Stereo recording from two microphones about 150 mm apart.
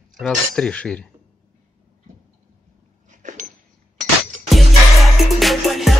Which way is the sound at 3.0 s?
55° right (ahead or behind).